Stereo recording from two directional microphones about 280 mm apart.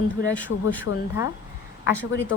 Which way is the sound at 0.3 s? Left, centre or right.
Centre.